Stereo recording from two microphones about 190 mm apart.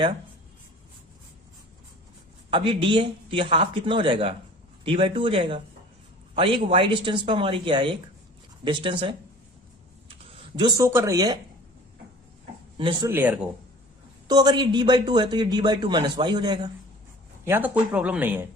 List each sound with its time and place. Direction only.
2.5 s speech: 25° right (ahead or behind)
10.3 s speech: 25° right (ahead or behind)
12.7 s speech: 25° right (ahead or behind)
13.1 s speech: 10° right (ahead or behind)
14.3 s speech: 20° right (ahead or behind)
17.4 s speech: 10° right (ahead or behind)